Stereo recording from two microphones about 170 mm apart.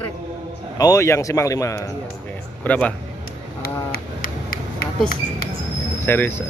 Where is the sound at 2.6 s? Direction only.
10° left (ahead or behind).